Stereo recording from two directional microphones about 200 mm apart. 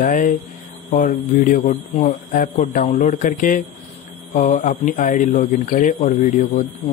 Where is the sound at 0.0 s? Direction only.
40° left (ahead or behind).